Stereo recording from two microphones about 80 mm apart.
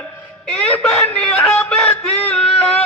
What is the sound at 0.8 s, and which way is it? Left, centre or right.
Speech, centre.